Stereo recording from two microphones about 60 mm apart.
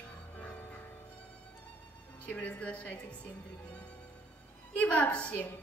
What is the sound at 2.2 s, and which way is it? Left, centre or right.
Speech, left.